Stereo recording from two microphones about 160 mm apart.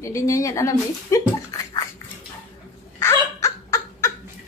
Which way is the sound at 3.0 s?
15° left (ahead or behind).